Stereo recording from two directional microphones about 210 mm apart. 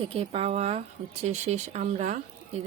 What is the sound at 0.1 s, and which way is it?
A woman's voice, 30° right (ahead or behind).